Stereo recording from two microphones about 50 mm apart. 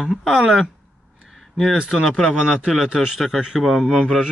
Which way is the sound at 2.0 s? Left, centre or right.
Centre.